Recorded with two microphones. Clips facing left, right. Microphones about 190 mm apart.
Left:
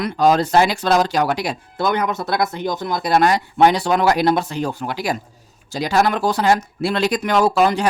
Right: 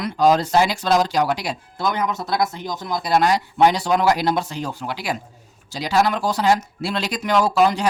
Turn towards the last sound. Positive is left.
turn(degrees=55)  # may be behind; listen again after turning